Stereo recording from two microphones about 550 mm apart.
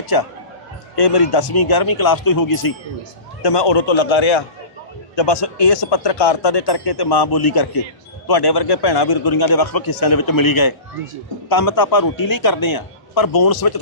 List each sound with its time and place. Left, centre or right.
0.1 s speech: left
3.4 s speech: left